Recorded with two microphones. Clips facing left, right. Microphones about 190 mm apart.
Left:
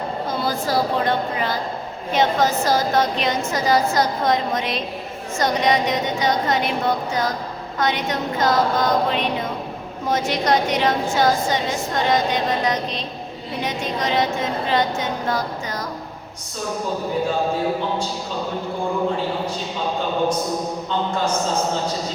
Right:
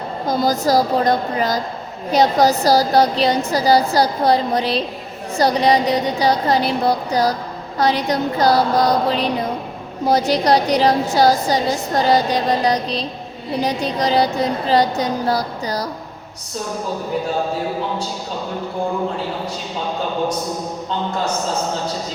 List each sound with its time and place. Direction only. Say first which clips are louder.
0.3 s a woman's voice: right 8 dB; 40° right (ahead or behind)